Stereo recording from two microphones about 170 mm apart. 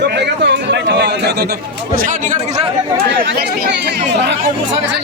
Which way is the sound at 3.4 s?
65° right (ahead or behind).